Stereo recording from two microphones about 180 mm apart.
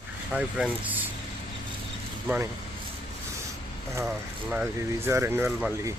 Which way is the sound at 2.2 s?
10° right (ahead or behind).